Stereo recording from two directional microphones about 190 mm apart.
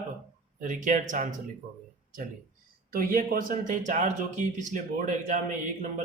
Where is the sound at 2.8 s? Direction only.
50° right (ahead or behind).